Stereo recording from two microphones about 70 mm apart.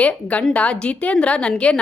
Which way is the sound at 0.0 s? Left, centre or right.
Centre.